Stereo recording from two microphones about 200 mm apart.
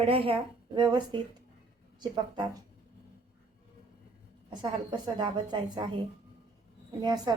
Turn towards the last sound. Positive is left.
turn(degrees=-20)  # may be behind; listen again after turning